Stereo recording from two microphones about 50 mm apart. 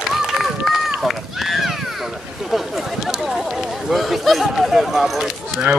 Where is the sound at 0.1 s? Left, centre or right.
Centre.